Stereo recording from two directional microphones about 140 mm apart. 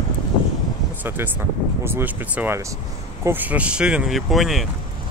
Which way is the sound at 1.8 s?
15° right (ahead or behind).